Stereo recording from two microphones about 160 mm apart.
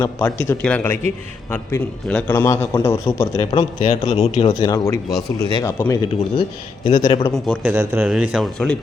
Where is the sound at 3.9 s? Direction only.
40° left (ahead or behind).